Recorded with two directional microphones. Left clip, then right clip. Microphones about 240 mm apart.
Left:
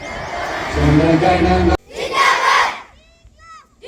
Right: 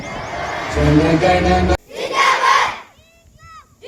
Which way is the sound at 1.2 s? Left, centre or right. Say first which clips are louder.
Even; right.